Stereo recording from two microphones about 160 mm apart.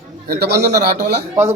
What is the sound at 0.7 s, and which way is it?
Speech, 50° right (ahead or behind).